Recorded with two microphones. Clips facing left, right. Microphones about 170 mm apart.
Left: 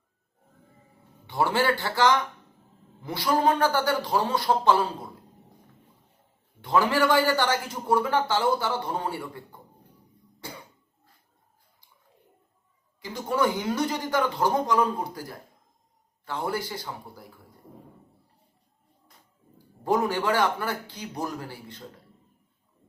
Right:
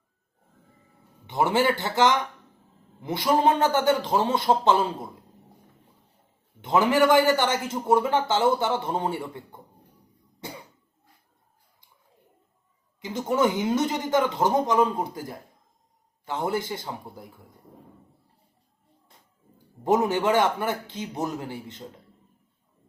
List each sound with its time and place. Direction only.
1.3 s a man's voice: 20° right (ahead or behind)
6.6 s a man's voice: 20° right (ahead or behind)
10.4 s cough: 20° right (ahead or behind)
13.0 s a man's voice: 20° right (ahead or behind)
19.8 s a man's voice: 20° right (ahead or behind)